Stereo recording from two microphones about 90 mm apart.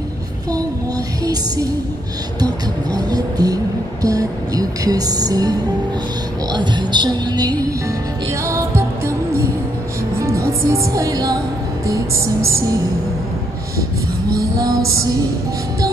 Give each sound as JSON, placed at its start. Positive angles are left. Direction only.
{"t": 0.5, "sound": "music", "side_deg": -40}
{"t": 2.4, "sound": "speech", "side_deg": -45}
{"t": 6.5, "sound": "speech", "side_deg": -55}
{"t": 8.3, "sound": "music", "side_deg": -30}
{"t": 10.1, "sound": "speech", "side_deg": -35}
{"t": 11.8, "sound": "music", "side_deg": -35}
{"t": 14.3, "sound": "music", "side_deg": -40}